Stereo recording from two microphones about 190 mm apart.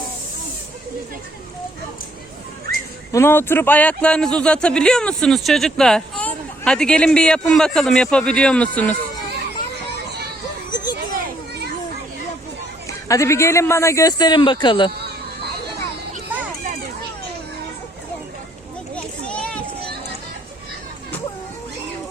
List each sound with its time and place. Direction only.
3.1 s a man's voice: 15° left (ahead or behind)
10.7 s a sound: 20° left (ahead or behind)
13.1 s a man's voice: 15° left (ahead or behind)
18.9 s children playing: 5° left (ahead or behind)